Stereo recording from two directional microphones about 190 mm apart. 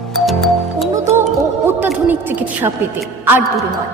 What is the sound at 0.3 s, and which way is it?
Music, centre (ahead or behind).